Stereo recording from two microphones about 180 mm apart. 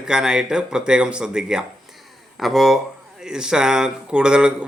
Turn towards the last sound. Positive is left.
turn(degrees=-5)  # may be behind; listen again after turning